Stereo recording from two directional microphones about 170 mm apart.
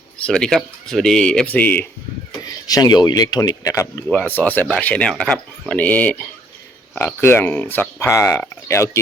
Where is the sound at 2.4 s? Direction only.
20° left (ahead or behind).